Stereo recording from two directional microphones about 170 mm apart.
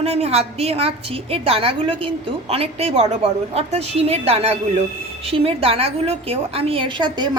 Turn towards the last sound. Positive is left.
turn(degrees=-25)  # may be behind; listen again after turning